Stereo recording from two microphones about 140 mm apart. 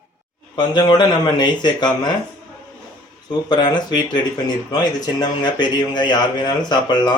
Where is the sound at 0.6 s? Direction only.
30° left (ahead or behind).